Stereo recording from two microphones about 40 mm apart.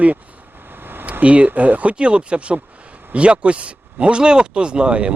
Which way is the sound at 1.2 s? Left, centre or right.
Right.